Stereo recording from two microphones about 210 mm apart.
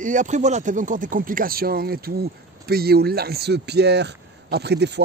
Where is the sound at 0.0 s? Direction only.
35° right (ahead or behind).